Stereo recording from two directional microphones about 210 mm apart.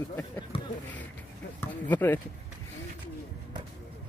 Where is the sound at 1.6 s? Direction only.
10° left (ahead or behind).